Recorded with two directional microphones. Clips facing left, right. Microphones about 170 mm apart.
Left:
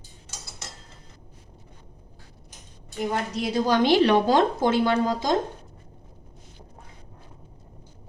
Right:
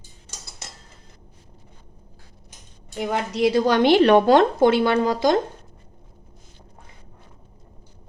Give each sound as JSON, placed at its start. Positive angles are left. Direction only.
{"t": 3.1, "sound": "speech", "side_deg": -80}